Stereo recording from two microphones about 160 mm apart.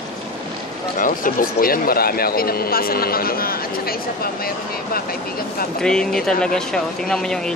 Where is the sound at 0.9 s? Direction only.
60° left (ahead or behind).